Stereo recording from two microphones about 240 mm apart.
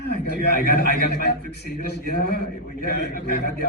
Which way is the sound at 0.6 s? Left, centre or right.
Left.